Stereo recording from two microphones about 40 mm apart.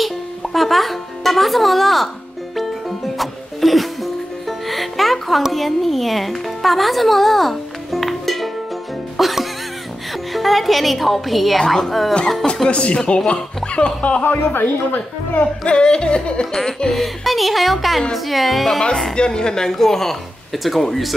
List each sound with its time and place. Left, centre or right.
0.0 s speech: centre
3.2 s music: centre
10.3 s a woman's voice: centre
12.6 s music: left
13.7 s speech: left
14.2 s speech: left
15.6 s music: left
16.5 s a woman's voice: centre
19.1 s a woman's voice: left; by 21.1 s centre